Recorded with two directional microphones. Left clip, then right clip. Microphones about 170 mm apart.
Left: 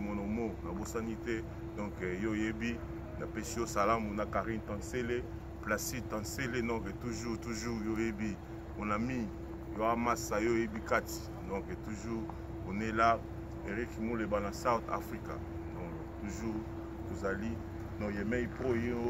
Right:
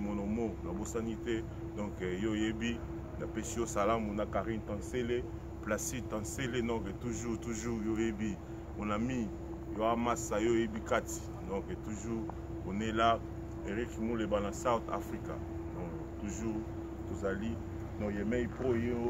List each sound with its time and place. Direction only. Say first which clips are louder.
0.9 s speech: right 1 dB; 5° right (ahead or behind)
12.7 s speech: left 1 dB; 5° right (ahead or behind)
17.2 s speech: even; 5° right (ahead or behind)